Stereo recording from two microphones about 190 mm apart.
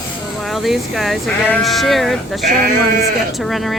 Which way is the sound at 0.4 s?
Centre (ahead or behind).